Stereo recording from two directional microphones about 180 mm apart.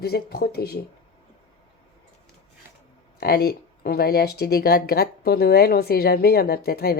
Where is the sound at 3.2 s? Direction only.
60° left (ahead or behind).